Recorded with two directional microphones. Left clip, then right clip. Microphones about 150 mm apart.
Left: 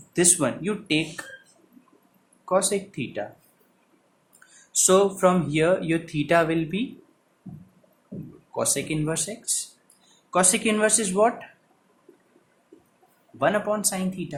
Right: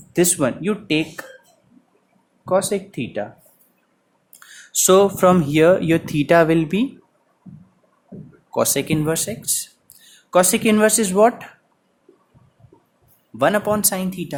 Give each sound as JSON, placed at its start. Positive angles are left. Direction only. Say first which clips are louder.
{"t": 0.1, "sound": "speech", "louder": "right 4 dB", "side_deg": -50}
{"t": 2.4, "sound": "speech", "louder": "right 4 dB", "side_deg": -45}
{"t": 4.7, "sound": "speech", "louder": "right 5 dB", "side_deg": -60}
{"t": 8.5, "sound": "speech", "louder": "right 7 dB", "side_deg": -75}
{"t": 10.3, "sound": "speech", "louder": "right 6 dB", "side_deg": -70}
{"t": 13.4, "sound": "speech", "louder": "right 5 dB", "side_deg": -90}